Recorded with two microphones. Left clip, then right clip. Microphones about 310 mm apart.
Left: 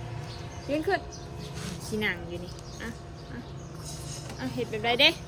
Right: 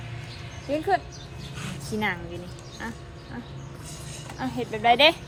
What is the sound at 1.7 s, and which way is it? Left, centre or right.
Dog, centre.